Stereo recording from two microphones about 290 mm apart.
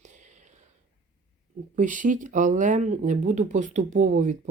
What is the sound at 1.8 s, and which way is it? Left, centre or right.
Speech, right.